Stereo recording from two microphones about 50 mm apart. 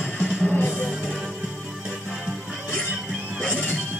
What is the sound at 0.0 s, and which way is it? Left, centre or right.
Music, centre.